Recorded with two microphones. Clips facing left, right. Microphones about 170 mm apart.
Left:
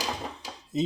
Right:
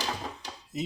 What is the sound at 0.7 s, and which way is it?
Speech, 30° left (ahead or behind).